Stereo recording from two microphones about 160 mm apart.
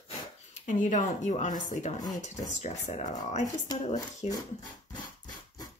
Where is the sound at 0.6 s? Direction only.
50° left (ahead or behind).